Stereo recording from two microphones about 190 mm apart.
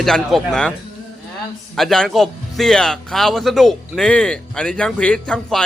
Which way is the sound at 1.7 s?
Centre (ahead or behind).